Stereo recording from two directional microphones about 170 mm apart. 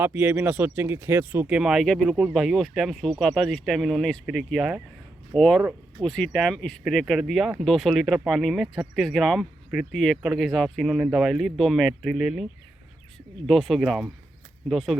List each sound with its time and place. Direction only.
0.0 s speech: 10° right (ahead or behind)
13.5 s speech: centre (ahead or behind)